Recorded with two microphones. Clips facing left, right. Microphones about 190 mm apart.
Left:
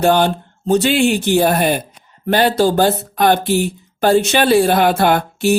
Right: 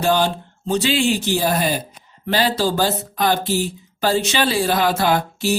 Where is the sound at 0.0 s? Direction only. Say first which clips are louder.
Left 5 dB; 55° left (ahead or behind).